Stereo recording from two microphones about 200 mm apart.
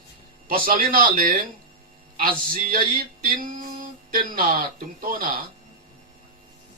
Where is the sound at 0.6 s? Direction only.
45° right (ahead or behind).